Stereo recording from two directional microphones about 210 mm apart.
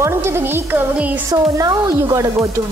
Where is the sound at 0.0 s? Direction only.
10° right (ahead or behind).